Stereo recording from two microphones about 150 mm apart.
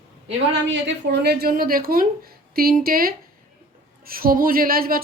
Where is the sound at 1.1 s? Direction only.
90° right.